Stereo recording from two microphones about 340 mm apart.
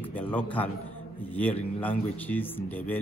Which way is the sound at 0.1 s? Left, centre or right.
Centre.